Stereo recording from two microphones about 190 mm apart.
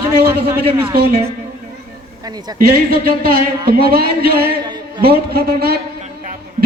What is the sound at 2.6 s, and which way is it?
A man's voice, 50° right (ahead or behind).